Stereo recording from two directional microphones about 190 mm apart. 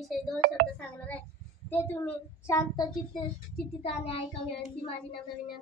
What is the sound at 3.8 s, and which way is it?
Child singing, 30° left (ahead or behind).